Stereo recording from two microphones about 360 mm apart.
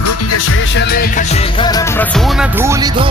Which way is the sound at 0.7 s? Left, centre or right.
Left.